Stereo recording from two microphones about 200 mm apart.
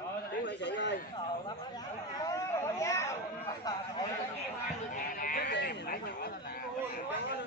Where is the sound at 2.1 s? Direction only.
15° left (ahead or behind).